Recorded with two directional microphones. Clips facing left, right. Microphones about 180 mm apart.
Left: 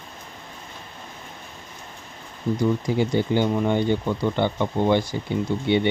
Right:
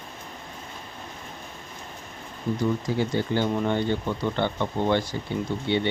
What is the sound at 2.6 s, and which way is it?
Speech, 15° left (ahead or behind).